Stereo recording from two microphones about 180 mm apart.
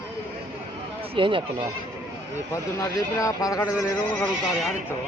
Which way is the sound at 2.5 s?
15° left (ahead or behind).